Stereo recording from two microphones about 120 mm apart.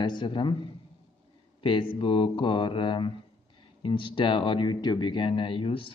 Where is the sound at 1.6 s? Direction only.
45° left (ahead or behind).